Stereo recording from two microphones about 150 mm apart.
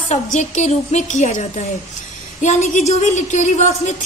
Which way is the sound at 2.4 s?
55° left (ahead or behind).